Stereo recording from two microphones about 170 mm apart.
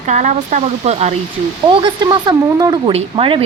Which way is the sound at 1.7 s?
30° right (ahead or behind).